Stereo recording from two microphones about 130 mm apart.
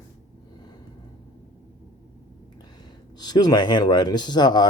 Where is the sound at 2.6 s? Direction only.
30° left (ahead or behind).